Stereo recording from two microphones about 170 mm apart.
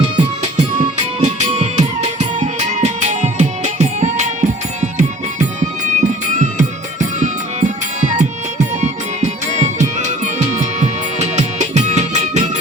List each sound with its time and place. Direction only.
1.2 s music: 40° right (ahead or behind)